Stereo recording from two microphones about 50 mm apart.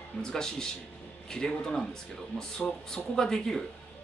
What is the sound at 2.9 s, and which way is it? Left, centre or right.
Speech, centre.